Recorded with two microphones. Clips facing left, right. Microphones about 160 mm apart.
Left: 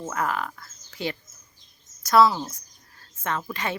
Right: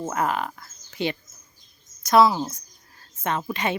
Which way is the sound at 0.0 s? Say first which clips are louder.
Right 3 dB; 20° right (ahead or behind).